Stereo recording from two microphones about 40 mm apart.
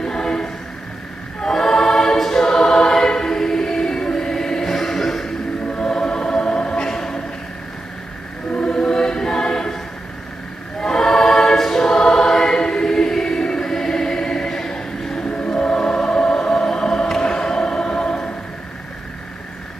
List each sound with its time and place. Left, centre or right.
0.0 s choir: centre
5.8 s music: centre
8.5 s choir: left
10.8 s choir: centre
15.5 s music: centre